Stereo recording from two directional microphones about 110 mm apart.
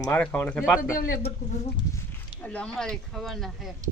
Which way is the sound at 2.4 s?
10° left (ahead or behind).